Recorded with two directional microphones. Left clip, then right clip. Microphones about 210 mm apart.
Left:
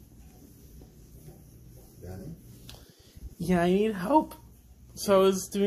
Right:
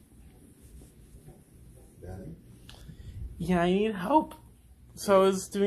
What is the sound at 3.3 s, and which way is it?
Speech, 10° left (ahead or behind).